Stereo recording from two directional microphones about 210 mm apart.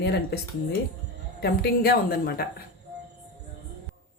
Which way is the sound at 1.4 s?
50° left (ahead or behind).